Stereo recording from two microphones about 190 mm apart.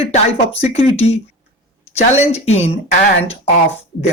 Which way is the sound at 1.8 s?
35° left (ahead or behind).